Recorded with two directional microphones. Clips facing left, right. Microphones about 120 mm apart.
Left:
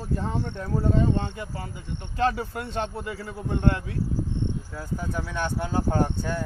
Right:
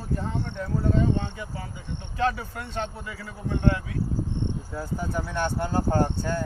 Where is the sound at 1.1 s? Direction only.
45° left (ahead or behind).